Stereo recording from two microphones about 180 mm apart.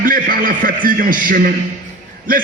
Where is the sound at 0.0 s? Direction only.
50° right (ahead or behind).